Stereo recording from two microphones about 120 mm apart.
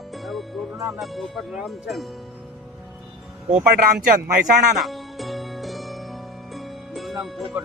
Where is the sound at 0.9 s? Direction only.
Centre (ahead or behind).